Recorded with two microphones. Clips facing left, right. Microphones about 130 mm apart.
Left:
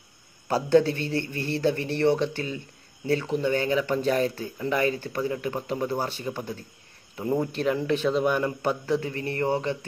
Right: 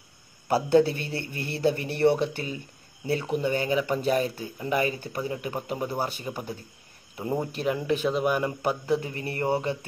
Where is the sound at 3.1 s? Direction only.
15° right (ahead or behind).